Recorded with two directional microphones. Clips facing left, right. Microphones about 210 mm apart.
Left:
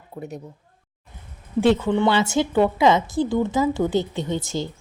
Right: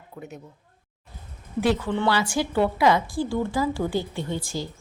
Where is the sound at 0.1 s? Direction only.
35° left (ahead or behind).